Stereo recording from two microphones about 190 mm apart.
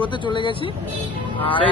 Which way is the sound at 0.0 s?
25° left (ahead or behind).